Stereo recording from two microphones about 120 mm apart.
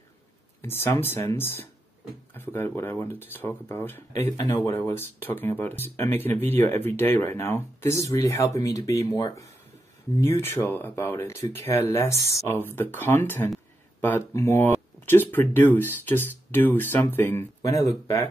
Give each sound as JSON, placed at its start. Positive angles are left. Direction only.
{"t": 0.6, "sound": "speech", "side_deg": 20}
{"t": 10.2, "sound": "speech", "side_deg": 20}
{"t": 17.6, "sound": "speech", "side_deg": 30}